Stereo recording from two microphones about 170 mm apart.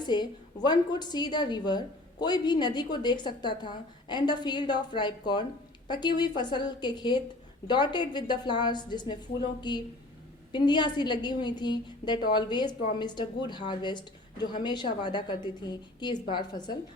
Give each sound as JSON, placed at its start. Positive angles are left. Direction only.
{"t": 0.0, "sound": "a woman's voice", "side_deg": 25}